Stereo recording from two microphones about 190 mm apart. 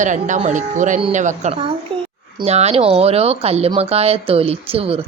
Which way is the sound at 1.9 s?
25° right (ahead or behind).